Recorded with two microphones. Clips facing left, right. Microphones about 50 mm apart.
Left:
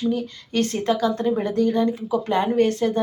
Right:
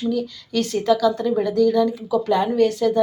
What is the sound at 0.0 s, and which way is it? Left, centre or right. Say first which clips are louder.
A woman's voice: right 1 dB; left.